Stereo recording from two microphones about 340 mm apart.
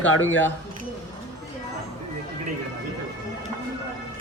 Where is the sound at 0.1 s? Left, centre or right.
Left.